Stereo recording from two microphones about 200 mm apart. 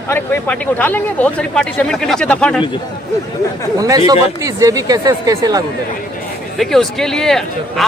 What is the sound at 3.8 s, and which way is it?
Speech, 20° right (ahead or behind).